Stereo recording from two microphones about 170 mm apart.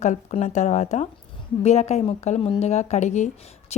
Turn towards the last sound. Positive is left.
turn(degrees=45)  # may be behind; listen again after turning